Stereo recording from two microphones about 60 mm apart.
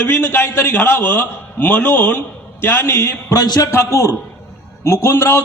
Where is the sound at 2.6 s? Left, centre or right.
Left.